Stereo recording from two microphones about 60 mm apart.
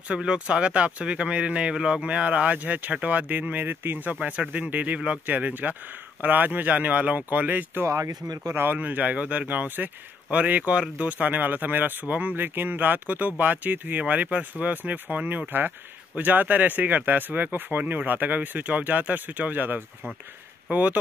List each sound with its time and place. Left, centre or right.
0.1 s speech: centre
5.2 s speech: right
7.8 s speech: right
8.7 s speech: right